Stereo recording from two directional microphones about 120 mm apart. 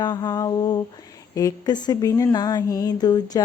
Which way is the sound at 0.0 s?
35° left (ahead or behind).